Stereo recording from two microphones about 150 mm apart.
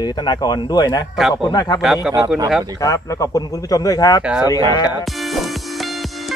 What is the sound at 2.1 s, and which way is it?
Speech, 25° right (ahead or behind).